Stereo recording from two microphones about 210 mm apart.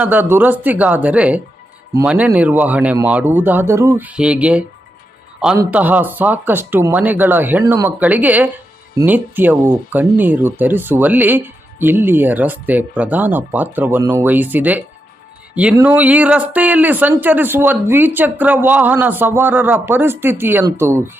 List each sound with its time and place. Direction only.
0.0 s speech: 10° right (ahead or behind)